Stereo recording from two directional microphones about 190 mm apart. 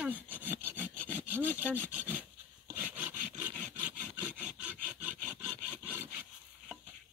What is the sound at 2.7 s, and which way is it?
Wood, 10° right (ahead or behind).